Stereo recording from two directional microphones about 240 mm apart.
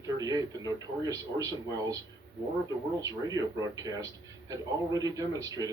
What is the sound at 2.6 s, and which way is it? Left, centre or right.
Speech, centre.